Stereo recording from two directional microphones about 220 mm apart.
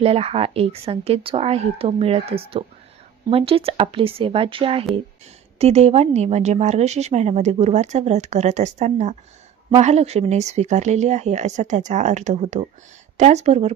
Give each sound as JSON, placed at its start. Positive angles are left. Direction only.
{"t": 0.0, "sound": "a woman's voice", "side_deg": -25}